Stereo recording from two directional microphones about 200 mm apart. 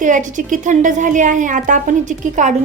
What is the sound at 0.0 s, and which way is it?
A woman's voice, 40° right (ahead or behind).